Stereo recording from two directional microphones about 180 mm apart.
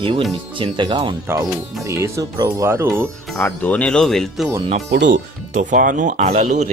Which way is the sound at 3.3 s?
10° left (ahead or behind).